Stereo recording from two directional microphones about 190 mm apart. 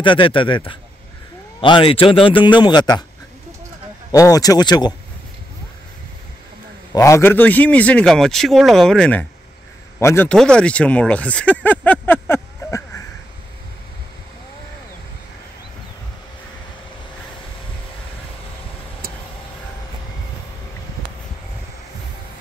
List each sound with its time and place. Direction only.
0.0 s a man's voice: 25° left (ahead or behind)
4.1 s a man's voice: 20° left (ahead or behind)
6.9 s a man's voice: 15° left (ahead or behind)